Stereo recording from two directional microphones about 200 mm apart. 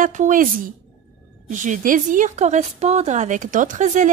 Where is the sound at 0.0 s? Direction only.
40° right (ahead or behind).